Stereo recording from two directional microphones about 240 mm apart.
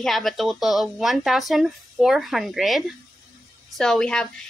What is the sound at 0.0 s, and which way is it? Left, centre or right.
Speech, centre.